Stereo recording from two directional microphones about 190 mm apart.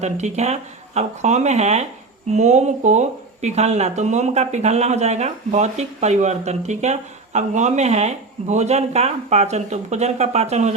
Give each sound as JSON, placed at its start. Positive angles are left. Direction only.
{"t": 0.0, "sound": "speech", "side_deg": -35}